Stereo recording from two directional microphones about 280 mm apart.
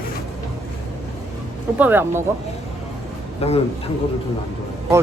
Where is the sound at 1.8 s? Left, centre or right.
Centre.